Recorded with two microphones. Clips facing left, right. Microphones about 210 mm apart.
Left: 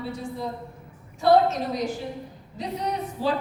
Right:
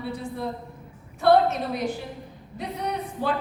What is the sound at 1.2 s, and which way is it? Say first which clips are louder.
A woman's voice: even; 60° right (ahead or behind).